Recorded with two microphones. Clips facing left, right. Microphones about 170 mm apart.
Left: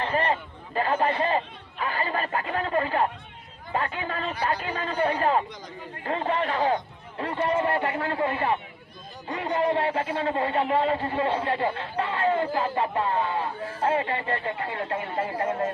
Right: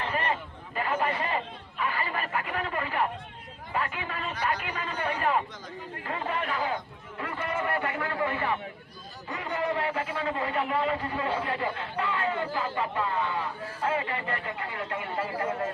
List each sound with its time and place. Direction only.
0.0 s speech: 30° left (ahead or behind)